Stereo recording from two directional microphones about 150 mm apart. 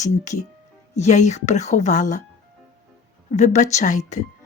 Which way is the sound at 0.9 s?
50° left (ahead or behind).